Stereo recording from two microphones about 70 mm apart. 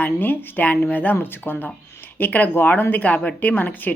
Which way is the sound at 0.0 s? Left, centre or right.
Left.